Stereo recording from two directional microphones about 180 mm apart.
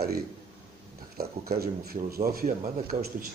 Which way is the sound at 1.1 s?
60° right (ahead or behind).